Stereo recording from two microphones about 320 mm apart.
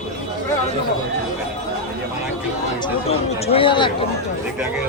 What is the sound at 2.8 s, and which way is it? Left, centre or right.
Speech, centre.